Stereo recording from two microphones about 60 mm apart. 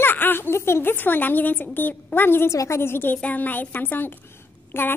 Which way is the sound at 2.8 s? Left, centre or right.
Left.